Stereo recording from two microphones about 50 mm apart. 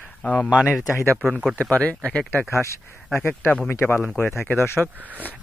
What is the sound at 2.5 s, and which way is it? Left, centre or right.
Speech, left.